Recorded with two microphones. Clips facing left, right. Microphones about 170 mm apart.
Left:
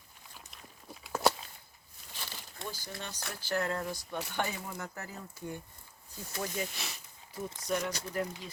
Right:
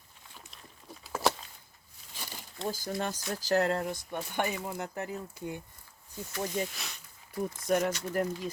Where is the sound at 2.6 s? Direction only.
45° right (ahead or behind).